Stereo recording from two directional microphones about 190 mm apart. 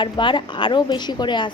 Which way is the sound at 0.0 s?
25° left (ahead or behind).